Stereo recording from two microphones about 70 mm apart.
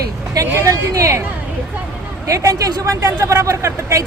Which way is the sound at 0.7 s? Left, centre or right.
Right.